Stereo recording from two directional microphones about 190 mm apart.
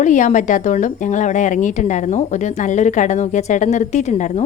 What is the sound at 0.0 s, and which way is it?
A woman's voice, 40° left (ahead or behind).